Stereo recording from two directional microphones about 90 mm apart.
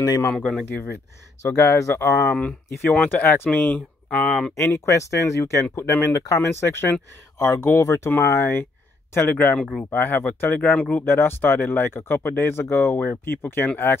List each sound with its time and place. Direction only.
0.0 s speech: 40° left (ahead or behind)
0.3 s speech: 10° left (ahead or behind)
1.6 s speech: 35° left (ahead or behind)
2.3 s speech: 10° left (ahead or behind)
4.6 s speech: 30° left (ahead or behind)
9.6 s speech: 10° left (ahead or behind)
9.8 s speech: 25° left (ahead or behind)
11.1 s speech: 25° left (ahead or behind)